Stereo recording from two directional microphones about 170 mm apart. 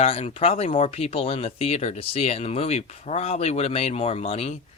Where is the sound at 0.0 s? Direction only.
35° left (ahead or behind).